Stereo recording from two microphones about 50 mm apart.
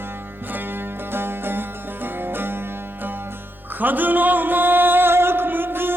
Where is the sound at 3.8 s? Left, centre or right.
Right.